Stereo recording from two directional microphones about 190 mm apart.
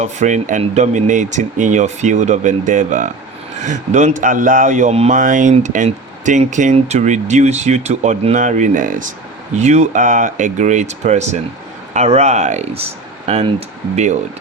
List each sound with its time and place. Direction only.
0.0 s speech: 40° right (ahead or behind)